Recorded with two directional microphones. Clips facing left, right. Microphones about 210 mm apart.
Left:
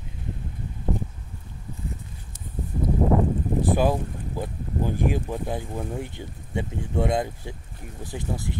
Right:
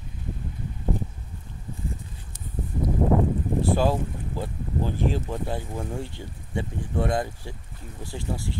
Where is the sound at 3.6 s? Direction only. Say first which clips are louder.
Left 1 dB; 15° left (ahead or behind).